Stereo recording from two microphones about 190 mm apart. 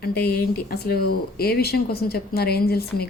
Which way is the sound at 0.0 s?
55° left (ahead or behind).